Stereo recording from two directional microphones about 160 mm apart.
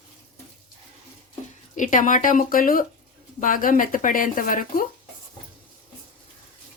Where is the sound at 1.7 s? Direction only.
55° left (ahead or behind).